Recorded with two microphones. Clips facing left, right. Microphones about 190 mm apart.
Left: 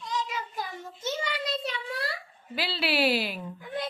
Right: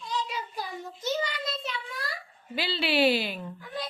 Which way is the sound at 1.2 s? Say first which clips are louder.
Left 3 dB; 35° left (ahead or behind).